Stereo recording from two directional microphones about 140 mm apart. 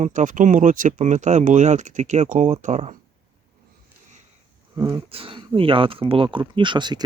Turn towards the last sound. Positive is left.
turn(degrees=-30)  # may be behind; listen again after turning